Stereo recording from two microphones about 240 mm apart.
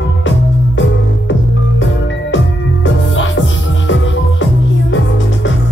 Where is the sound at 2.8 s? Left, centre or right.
Left.